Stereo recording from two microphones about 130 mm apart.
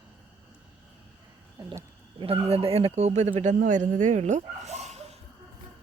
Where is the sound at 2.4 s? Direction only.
50° right (ahead or behind).